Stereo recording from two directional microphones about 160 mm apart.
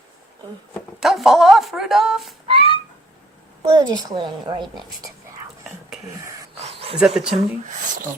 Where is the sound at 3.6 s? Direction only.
25° right (ahead or behind).